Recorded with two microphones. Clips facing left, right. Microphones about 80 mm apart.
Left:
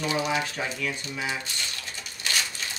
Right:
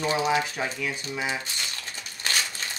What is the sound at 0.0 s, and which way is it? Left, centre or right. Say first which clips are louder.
Speech: right 3 dB; right.